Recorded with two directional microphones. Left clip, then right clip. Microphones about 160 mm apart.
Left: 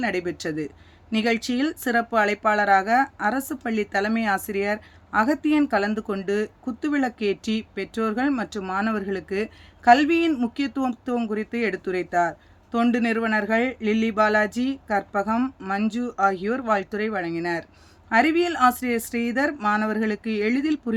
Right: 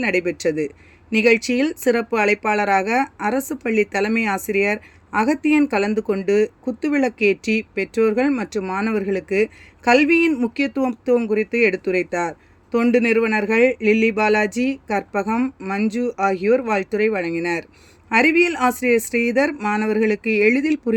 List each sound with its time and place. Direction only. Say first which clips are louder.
0.0 s speech: right 6 dB; 15° right (ahead or behind)